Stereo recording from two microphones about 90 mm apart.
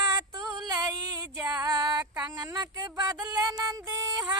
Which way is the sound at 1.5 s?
40° right (ahead or behind).